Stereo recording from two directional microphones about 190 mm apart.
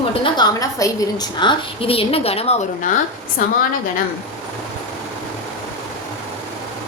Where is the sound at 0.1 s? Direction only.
20° left (ahead or behind); by 2.9 s 35° left (ahead or behind).